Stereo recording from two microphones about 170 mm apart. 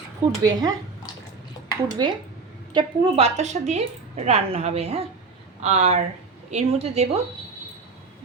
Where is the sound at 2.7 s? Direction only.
35° right (ahead or behind).